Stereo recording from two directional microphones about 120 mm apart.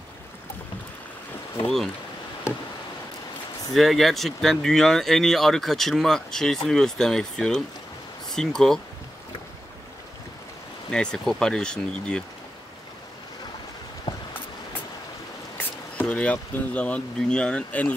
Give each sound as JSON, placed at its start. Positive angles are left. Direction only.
{"t": 2.5, "sound": "a sound", "side_deg": 20}
{"t": 3.7, "sound": "speech", "side_deg": 0}
{"t": 10.9, "sound": "speech", "side_deg": 5}
{"t": 15.5, "sound": "speech", "side_deg": 10}